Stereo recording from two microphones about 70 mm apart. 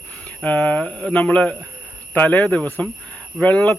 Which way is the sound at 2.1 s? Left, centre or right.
Left.